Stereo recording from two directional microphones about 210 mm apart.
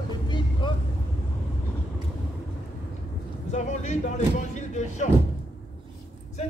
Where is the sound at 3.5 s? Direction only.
35° left (ahead or behind).